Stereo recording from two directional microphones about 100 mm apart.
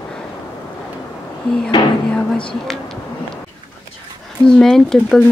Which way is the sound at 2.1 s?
10° left (ahead or behind).